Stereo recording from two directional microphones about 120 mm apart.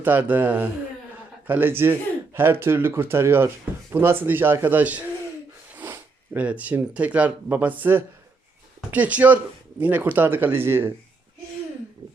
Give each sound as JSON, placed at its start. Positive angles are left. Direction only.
{"t": 0.0, "sound": "speech", "side_deg": -15}